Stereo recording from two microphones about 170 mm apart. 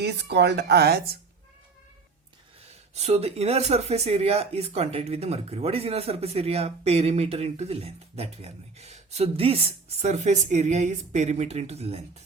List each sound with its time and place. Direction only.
0.0 s speech: 80° right
2.9 s speech: 40° right (ahead or behind)